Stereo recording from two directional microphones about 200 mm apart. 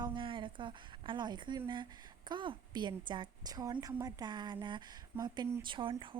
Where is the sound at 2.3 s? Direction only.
25° right (ahead or behind).